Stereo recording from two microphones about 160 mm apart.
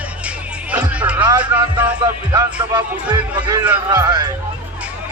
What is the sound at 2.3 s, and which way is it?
Speech, 25° right (ahead or behind).